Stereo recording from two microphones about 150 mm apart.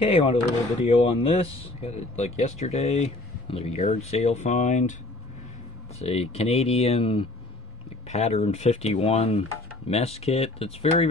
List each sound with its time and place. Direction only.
0.0 s speech: 40° left (ahead or behind)
5.9 s speech: 45° left (ahead or behind)